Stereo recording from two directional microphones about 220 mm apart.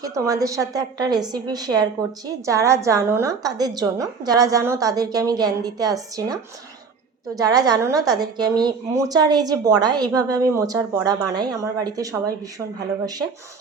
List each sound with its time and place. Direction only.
0.0 s a woman's voice: 15° right (ahead or behind)